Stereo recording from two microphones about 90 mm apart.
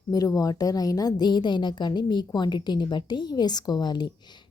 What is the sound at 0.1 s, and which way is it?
A woman's voice, 45° left (ahead or behind).